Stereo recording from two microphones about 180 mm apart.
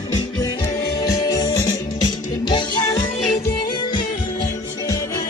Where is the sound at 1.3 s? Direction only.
20° left (ahead or behind).